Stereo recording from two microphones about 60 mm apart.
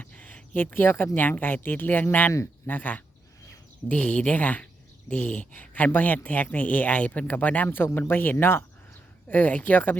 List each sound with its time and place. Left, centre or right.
0.0 s speech: left
9.3 s speech: left